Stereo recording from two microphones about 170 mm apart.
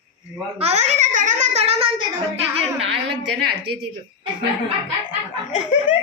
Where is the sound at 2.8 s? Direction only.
90° right.